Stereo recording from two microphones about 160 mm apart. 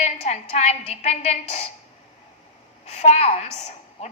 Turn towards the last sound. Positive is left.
turn(degrees=40)  # may be behind; listen again after turning